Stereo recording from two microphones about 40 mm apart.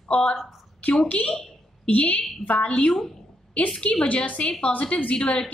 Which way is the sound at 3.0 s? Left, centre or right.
Centre.